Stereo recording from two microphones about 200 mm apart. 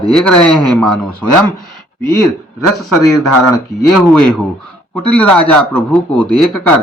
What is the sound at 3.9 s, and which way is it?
A man's voice, centre (ahead or behind).